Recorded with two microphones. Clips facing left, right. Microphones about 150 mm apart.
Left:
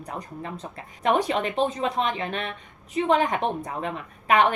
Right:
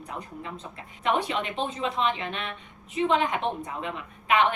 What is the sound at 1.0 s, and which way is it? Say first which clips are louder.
A woman's voice: left 4 dB; 40° left (ahead or behind).